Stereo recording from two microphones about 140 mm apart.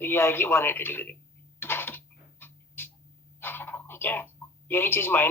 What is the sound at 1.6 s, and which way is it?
Cough, 15° left (ahead or behind).